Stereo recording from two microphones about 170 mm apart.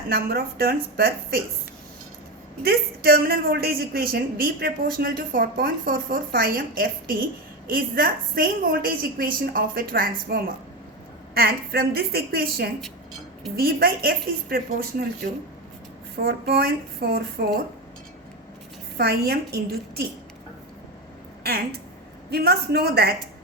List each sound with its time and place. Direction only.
0.1 s speech: 60° right (ahead or behind)
2.6 s speech: 65° right (ahead or behind)
16.2 s speech: 70° right (ahead or behind)
18.9 s speech: 70° right (ahead or behind)
21.4 s speech: 70° right (ahead or behind)